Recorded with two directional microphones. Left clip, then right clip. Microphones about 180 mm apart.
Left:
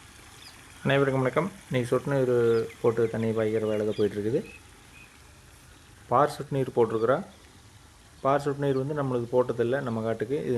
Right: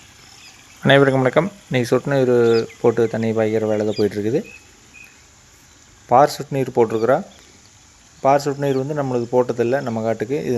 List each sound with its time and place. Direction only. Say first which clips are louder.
0.8 s speech: right 11 dB; 40° right (ahead or behind)
6.1 s speech: right 10 dB; 25° right (ahead or behind)
8.2 s speech: right 9 dB; 25° right (ahead or behind)